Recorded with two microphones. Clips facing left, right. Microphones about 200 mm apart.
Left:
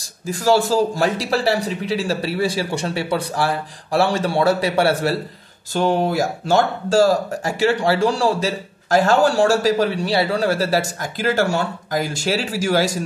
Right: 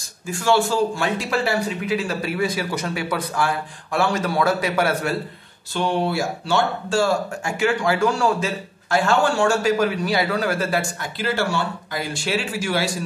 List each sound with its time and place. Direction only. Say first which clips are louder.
0.3 s speech: left 3 dB; 35° left (ahead or behind)
5.7 s speech: left 4 dB; 40° left (ahead or behind)